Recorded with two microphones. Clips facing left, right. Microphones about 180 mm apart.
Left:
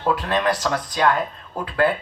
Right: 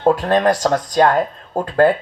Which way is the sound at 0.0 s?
45° right (ahead or behind).